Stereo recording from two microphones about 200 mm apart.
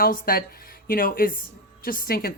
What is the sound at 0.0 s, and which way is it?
Speech, 45° left (ahead or behind).